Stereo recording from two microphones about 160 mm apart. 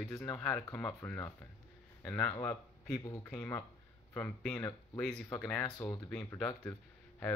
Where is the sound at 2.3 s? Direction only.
20° left (ahead or behind).